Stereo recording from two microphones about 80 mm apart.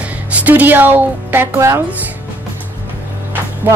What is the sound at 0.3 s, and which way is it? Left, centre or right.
Speech, centre.